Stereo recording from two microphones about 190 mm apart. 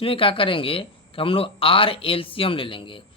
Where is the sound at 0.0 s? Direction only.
30° left (ahead or behind).